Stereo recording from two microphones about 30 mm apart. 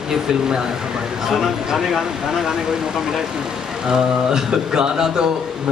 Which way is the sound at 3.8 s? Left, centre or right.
Right.